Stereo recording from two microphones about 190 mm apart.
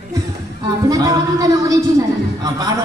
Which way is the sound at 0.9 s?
20° right (ahead or behind).